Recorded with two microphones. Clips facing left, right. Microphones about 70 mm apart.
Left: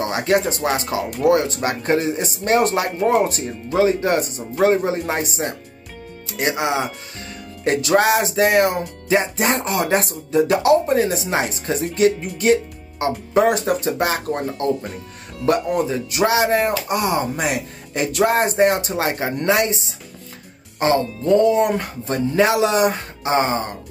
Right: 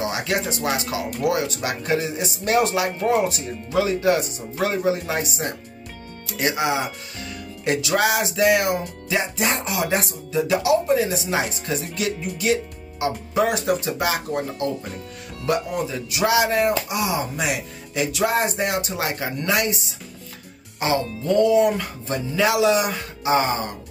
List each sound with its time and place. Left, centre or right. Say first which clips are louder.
0.1 s speech: left 6 dB; left
7.6 s music: left 4 dB; left
13.3 s speech: left 4 dB; left
21.4 s speech: right 2 dB; left